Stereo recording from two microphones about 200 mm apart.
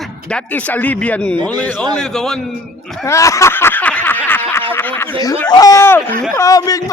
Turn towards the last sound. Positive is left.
turn(degrees=15)  # may be behind; listen again after turning